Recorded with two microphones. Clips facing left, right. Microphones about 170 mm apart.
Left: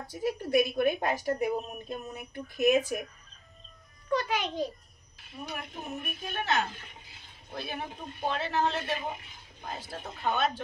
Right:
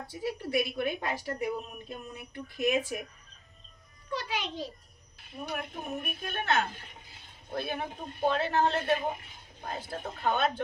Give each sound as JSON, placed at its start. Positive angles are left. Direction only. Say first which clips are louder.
{"t": 0.0, "sound": "a woman's voice", "louder": "left 3 dB", "side_deg": 45}
{"t": 4.1, "sound": "a woman's voice", "louder": "left 5 dB", "side_deg": 50}
{"t": 5.4, "sound": "a woman's voice", "louder": "right 2 dB", "side_deg": -55}